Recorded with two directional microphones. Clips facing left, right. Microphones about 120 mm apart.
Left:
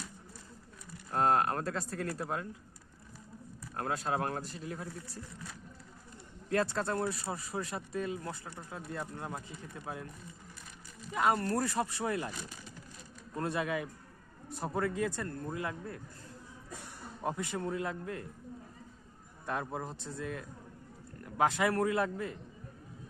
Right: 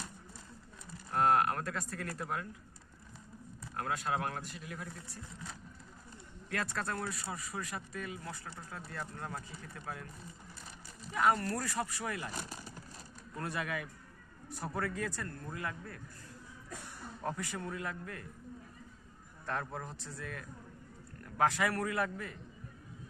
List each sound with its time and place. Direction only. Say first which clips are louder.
1.1 s speech: even; 30° left (ahead or behind)
3.8 s speech: left 2 dB; 30° left (ahead or behind)
6.5 s speech: left 6 dB; 30° left (ahead or behind)
11.1 s speech: left 1 dB; 25° left (ahead or behind)
12.4 s speech: right 2 dB; 40° right (ahead or behind)
13.3 s speech: left 5 dB; 25° left (ahead or behind)
17.2 s speech: left 4 dB; 20° left (ahead or behind)
19.5 s speech: left 2 dB; 20° left (ahead or behind)